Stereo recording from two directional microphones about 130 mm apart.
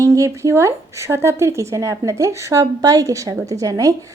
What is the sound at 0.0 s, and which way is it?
Speech, 25° right (ahead or behind).